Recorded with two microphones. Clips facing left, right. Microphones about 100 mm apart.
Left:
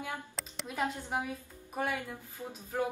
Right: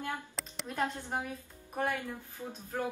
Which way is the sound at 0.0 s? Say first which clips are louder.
Right 1 dB; 5° left (ahead or behind).